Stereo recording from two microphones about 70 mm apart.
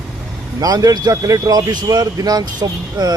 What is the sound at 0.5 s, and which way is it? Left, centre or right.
A man's voice, right.